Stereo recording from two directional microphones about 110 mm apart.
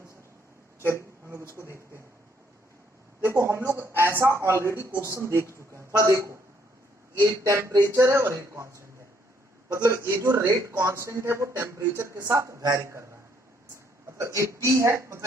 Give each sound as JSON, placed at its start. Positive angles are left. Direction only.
{"t": 1.5, "sound": "speech", "side_deg": -25}
{"t": 3.2, "sound": "speech", "side_deg": -25}
{"t": 7.7, "sound": "speech", "side_deg": -40}
{"t": 7.9, "sound": "speech", "side_deg": -25}
{"t": 14.2, "sound": "speech", "side_deg": -25}